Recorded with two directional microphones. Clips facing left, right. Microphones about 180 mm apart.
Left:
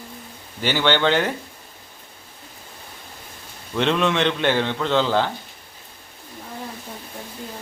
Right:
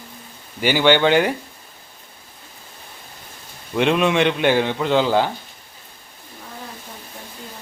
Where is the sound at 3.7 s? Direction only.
10° right (ahead or behind).